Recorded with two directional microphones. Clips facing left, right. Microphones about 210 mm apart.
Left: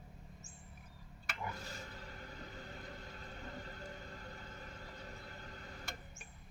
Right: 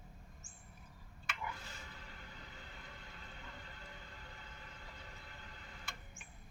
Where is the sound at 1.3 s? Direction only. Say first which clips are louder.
Left 2 dB; 40° left (ahead or behind).